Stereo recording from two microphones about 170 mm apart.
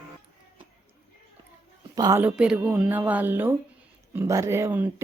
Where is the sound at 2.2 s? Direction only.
5° right (ahead or behind).